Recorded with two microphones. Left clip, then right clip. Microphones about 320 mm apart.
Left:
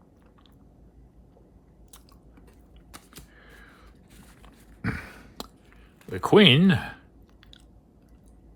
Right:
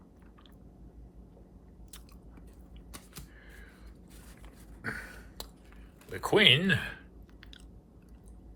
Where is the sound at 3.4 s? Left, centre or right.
Centre.